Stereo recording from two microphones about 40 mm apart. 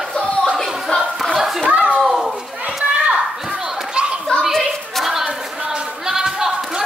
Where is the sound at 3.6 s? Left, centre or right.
Centre.